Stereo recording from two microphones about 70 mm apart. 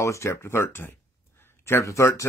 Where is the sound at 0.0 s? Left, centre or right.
Left.